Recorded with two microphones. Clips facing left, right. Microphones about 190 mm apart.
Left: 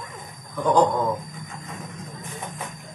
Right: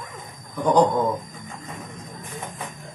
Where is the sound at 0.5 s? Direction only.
15° right (ahead or behind).